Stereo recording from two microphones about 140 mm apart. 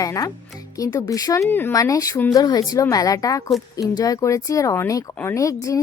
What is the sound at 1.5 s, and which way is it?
Speech, 15° left (ahead or behind).